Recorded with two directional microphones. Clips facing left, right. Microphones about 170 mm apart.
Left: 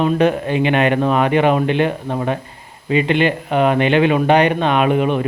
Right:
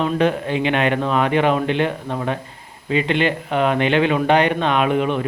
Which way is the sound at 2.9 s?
10° left (ahead or behind).